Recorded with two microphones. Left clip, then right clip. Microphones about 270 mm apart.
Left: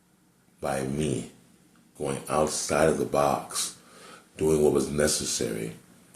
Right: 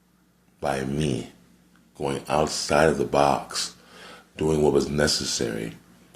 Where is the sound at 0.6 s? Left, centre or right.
Right.